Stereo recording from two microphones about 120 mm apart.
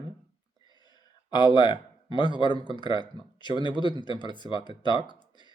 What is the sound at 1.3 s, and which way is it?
A man's voice, 35° left (ahead or behind).